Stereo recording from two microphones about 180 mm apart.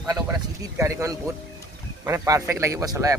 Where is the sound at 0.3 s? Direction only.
15° right (ahead or behind).